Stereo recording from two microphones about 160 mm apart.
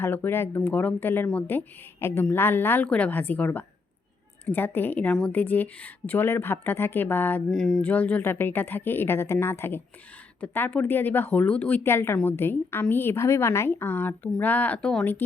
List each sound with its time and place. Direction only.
0.0 s a woman's voice: 15° left (ahead or behind)